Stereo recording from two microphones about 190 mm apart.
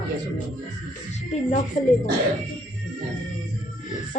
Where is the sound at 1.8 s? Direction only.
45° left (ahead or behind).